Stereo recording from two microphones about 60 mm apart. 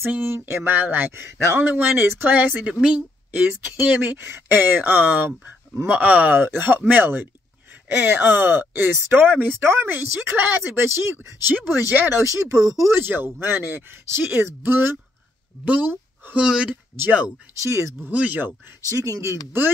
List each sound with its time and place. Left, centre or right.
0.0 s speech: right
0.7 s a woman's voice: right
9.6 s speech: right
12.3 s speech: right
12.9 s speech: right
15.6 s speech: right
17.6 s speech: right
18.0 s speech: right
18.9 s speech: right